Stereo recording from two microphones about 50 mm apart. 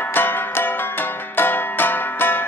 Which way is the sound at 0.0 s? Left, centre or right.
Left.